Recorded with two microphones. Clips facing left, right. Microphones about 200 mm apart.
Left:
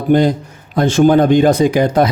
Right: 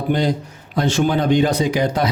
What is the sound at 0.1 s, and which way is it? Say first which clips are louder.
Speech: left 8 dB; 50° left (ahead or behind).